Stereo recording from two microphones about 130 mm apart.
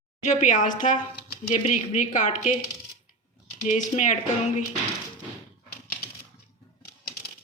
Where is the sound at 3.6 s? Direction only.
65° left (ahead or behind).